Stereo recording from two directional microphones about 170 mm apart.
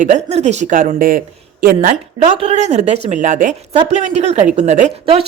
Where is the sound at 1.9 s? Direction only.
35° right (ahead or behind).